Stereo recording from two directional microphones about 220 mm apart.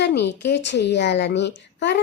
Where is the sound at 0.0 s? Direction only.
50° left (ahead or behind).